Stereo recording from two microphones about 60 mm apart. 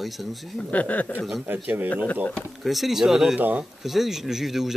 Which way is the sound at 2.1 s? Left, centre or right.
Left.